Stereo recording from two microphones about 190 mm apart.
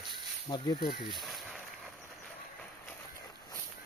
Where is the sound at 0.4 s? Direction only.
25° left (ahead or behind).